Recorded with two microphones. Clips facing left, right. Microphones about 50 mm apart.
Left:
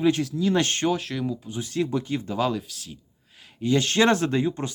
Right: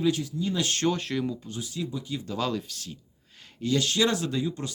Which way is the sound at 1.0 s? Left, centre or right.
Centre.